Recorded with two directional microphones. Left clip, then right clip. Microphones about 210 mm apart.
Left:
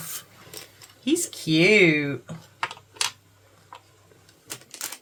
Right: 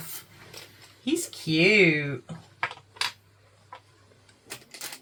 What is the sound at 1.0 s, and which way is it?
Female singing, 15° left (ahead or behind).